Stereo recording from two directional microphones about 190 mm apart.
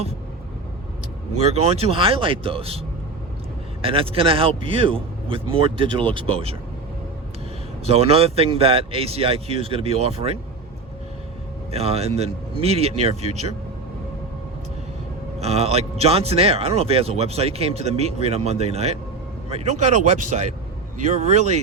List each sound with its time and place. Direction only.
1.4 s a man's voice: 35° right (ahead or behind)
7.9 s speech: 30° right (ahead or behind)
11.7 s speech: 30° right (ahead or behind)
15.4 s speech: 35° right (ahead or behind)